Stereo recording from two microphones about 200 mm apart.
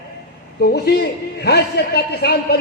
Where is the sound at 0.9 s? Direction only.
55° left (ahead or behind).